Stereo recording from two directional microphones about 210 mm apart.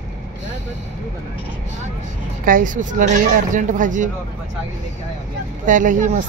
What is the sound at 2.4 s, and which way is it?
Speech, 40° right (ahead or behind).